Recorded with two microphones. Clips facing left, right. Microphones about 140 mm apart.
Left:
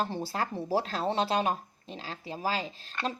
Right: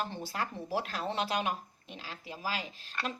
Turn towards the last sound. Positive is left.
turn(degrees=35)  # may be behind; listen again after turning